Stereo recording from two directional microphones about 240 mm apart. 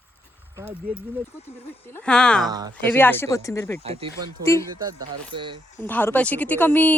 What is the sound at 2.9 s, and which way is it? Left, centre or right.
Speech, centre.